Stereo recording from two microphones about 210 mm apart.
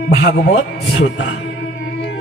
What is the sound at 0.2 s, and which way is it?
Speech, 55° left (ahead or behind).